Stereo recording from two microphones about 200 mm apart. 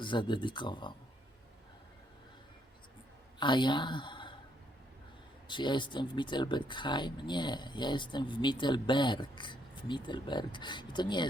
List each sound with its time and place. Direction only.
0.0 s speech: 25° left (ahead or behind)
3.4 s speech: 25° left (ahead or behind)
5.5 s speech: 25° left (ahead or behind)